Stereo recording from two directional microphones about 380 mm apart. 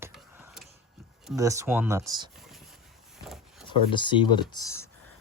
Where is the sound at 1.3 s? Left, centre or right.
Centre.